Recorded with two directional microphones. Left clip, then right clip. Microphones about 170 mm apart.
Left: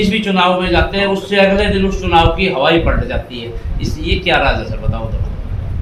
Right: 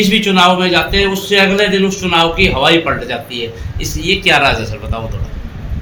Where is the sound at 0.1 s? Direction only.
60° right (ahead or behind).